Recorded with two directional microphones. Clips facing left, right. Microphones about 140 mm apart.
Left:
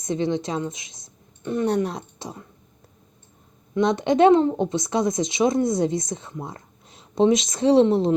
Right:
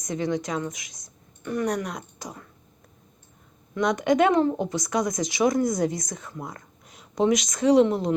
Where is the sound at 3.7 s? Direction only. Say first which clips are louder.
Left 2 dB; 25° left (ahead or behind).